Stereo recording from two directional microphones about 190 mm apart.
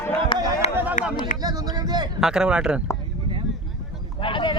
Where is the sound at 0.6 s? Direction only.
35° left (ahead or behind).